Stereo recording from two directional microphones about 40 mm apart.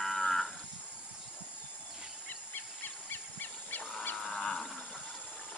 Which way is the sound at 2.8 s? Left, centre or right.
Left.